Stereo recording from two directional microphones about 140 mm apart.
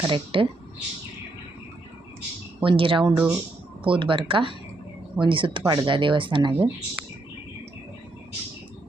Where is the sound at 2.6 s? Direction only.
40° right (ahead or behind).